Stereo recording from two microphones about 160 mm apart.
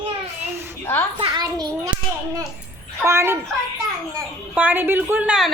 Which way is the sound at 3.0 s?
15° right (ahead or behind).